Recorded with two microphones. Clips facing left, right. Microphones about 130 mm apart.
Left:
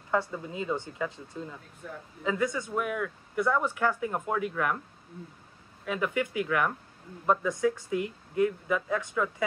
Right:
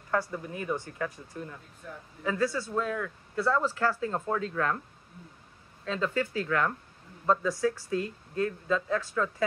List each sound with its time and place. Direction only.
0.1 s speech: 20° left (ahead or behind)
5.9 s speech: 15° left (ahead or behind)